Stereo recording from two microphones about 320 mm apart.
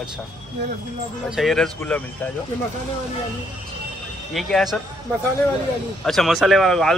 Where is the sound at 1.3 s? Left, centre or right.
Centre.